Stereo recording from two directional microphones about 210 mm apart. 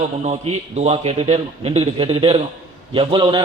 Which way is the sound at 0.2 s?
30° right (ahead or behind).